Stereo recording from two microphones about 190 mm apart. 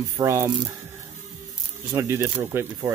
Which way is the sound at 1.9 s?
15° right (ahead or behind).